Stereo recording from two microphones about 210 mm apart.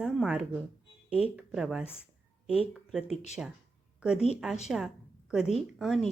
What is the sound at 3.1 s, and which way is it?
Speech, 35° left (ahead or behind).